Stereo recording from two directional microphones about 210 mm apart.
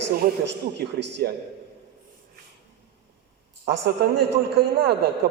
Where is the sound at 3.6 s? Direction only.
55° right (ahead or behind).